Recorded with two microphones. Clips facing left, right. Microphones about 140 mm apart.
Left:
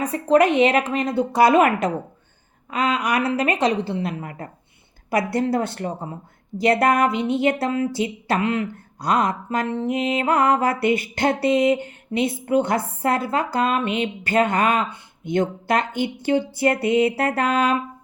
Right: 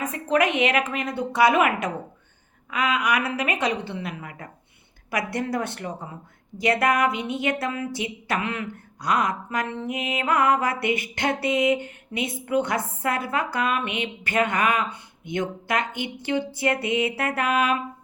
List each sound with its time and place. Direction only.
0.0 s a woman's voice: 35° left (ahead or behind)